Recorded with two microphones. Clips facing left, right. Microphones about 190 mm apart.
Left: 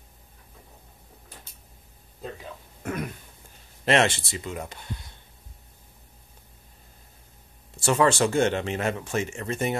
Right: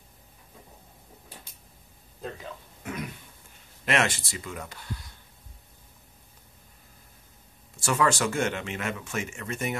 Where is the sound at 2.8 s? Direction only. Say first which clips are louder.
Left 4 dB; 50° left (ahead or behind).